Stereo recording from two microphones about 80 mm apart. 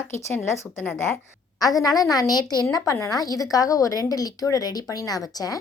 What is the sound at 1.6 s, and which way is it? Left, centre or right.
A woman's voice, left.